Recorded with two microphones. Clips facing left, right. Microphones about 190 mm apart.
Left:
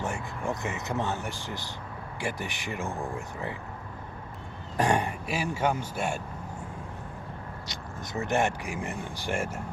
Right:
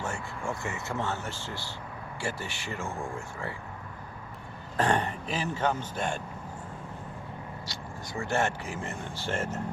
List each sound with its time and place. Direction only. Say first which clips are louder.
0.0 s speech: left 2 dB; 20° left (ahead or behind)
4.8 s speech: left 1 dB; 10° left (ahead or behind)
7.7 s speech: left 4 dB; 20° left (ahead or behind)